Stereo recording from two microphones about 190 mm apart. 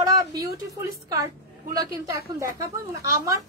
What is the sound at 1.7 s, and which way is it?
Speech, 20° right (ahead or behind).